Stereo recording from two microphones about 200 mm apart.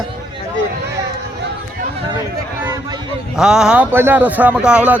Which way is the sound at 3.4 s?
5° right (ahead or behind).